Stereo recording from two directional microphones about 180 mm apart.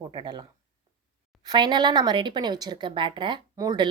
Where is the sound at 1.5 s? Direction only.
25° right (ahead or behind).